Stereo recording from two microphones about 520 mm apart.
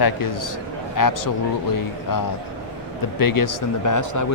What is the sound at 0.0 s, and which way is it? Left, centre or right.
Speech, left.